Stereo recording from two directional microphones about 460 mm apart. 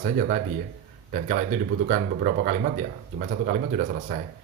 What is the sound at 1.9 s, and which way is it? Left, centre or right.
Speech, centre.